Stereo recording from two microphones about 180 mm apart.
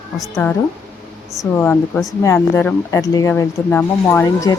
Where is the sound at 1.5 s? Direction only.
5° left (ahead or behind).